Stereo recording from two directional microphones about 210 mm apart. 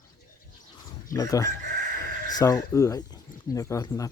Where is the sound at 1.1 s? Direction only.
15° left (ahead or behind).